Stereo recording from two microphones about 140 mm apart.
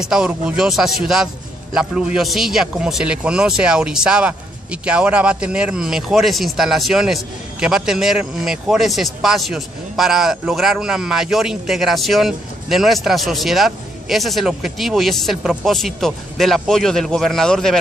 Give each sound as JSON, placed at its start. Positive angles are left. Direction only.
{"t": 0.0, "sound": "speech", "side_deg": -5}